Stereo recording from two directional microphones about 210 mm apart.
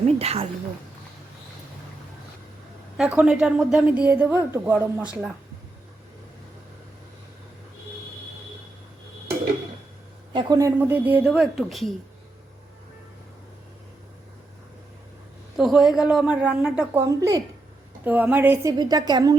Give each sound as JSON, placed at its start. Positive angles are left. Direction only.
{"t": 0.2, "sound": "speech", "side_deg": -30}
{"t": 3.0, "sound": "a woman's voice", "side_deg": -5}
{"t": 10.3, "sound": "a woman's voice", "side_deg": -15}
{"t": 15.5, "sound": "a woman's voice", "side_deg": 0}